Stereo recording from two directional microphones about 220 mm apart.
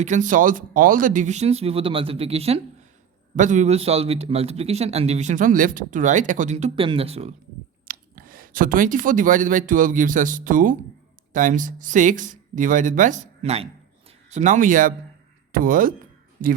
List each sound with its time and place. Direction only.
0.0 s a man's voice: 35° right (ahead or behind)
7.9 s speech: 40° right (ahead or behind)